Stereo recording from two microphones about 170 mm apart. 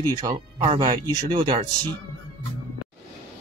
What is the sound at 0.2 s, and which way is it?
Speech, 25° right (ahead or behind).